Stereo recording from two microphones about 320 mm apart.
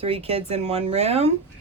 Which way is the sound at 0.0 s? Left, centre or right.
Centre.